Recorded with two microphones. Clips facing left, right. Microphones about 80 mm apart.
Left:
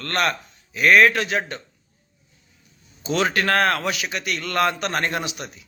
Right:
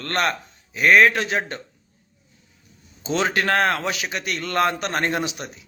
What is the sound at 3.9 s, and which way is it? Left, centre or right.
A man's voice, right.